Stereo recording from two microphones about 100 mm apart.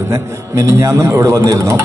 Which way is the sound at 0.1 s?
30° right (ahead or behind).